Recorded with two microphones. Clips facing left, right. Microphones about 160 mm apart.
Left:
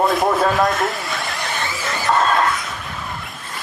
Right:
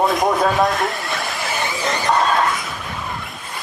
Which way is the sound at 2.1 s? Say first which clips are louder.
Left 1 dB; centre (ahead or behind).